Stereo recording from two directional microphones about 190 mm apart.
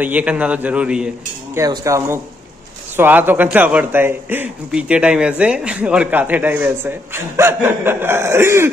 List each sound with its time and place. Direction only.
0.0 s a man's voice: 5° right (ahead or behind)
1.6 s a man's voice: 20° right (ahead or behind)